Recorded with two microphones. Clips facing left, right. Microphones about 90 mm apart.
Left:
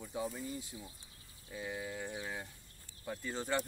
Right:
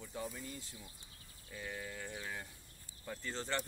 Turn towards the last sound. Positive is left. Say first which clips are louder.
# left 3 dB
turn(degrees=10)  # may be behind; listen again after turning